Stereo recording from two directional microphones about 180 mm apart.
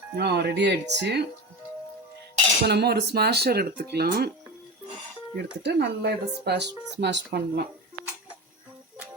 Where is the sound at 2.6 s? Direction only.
65° right (ahead or behind).